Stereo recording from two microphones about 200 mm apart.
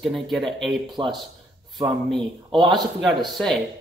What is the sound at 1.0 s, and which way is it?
Speech, 20° right (ahead or behind).